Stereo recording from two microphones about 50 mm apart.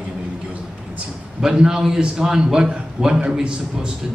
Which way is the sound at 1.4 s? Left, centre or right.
Centre.